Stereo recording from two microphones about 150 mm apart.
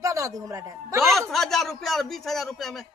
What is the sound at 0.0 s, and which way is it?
A man's voice, 20° right (ahead or behind).